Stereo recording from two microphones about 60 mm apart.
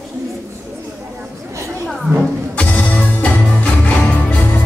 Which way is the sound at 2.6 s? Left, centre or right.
Left.